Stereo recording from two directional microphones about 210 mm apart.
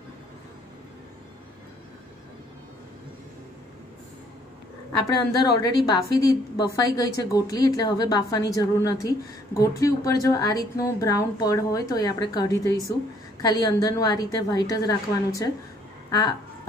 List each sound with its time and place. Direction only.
4.9 s a woman's voice: 20° left (ahead or behind)